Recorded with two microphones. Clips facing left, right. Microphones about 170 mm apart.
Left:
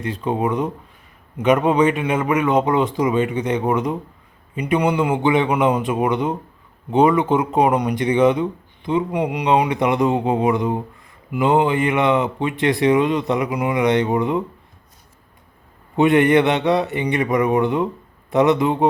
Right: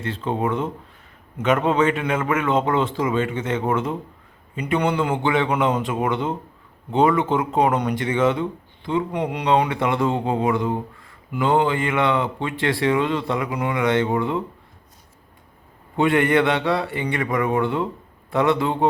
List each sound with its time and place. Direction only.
0.0 s speech: 15° left (ahead or behind)
16.0 s speech: 20° left (ahead or behind)